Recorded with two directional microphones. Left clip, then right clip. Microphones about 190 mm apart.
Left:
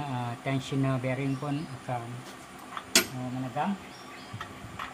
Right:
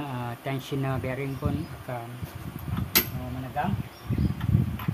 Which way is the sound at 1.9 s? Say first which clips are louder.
Left 1 dB; 25° right (ahead or behind).